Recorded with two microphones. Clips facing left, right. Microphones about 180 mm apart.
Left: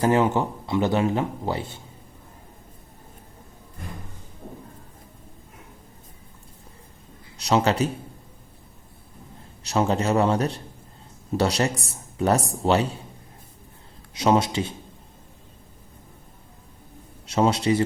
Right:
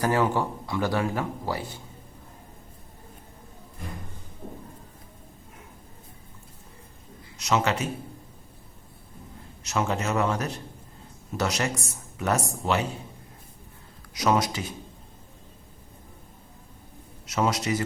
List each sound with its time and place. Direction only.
0.0 s speech: 20° left (ahead or behind)
7.3 s a man's voice: 35° left (ahead or behind)
9.6 s speech: 35° left (ahead or behind)
14.1 s speech: 25° left (ahead or behind)
17.2 s speech: 30° left (ahead or behind)